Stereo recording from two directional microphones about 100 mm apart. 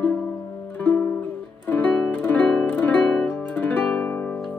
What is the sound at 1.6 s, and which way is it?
Music, 15° left (ahead or behind).